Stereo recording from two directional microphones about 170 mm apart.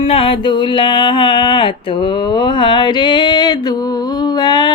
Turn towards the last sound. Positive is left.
turn(degrees=25)  # may be behind; listen again after turning